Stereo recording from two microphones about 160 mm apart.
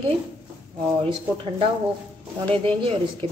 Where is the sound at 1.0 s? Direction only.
35° right (ahead or behind).